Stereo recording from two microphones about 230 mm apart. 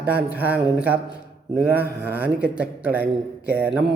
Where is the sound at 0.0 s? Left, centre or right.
Centre.